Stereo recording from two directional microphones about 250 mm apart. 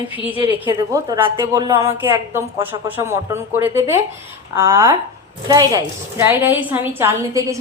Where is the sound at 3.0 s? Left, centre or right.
Centre.